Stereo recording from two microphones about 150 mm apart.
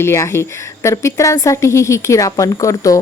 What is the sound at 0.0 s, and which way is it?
A woman's voice, 15° left (ahead or behind).